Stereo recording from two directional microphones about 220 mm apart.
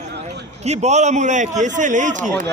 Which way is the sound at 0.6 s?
30° right (ahead or behind).